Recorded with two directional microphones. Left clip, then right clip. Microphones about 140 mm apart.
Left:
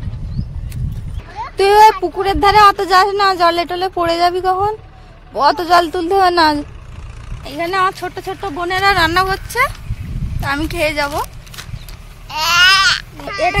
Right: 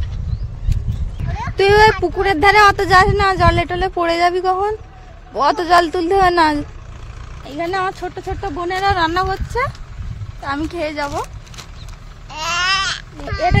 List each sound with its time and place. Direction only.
1.6 s speech: 10° left (ahead or behind)
8.9 s speech: 20° left (ahead or behind)
12.3 s babbling: 10° right (ahead or behind)